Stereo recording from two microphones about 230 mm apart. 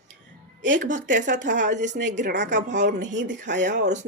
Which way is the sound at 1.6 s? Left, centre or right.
Right.